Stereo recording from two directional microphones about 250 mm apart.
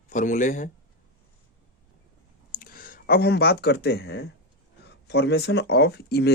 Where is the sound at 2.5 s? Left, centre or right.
Left.